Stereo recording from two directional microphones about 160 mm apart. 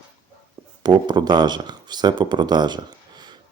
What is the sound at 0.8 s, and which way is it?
Speech, 25° right (ahead or behind).